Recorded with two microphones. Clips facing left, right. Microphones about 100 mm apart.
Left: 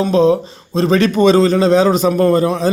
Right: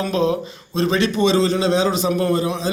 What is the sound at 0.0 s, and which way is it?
A man's voice, 30° left (ahead or behind).